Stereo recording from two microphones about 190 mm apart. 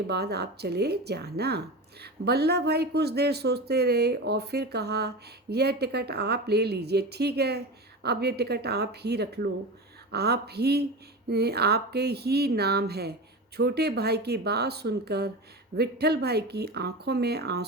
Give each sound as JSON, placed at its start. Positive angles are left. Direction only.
{"t": 0.1, "sound": "speech", "side_deg": -60}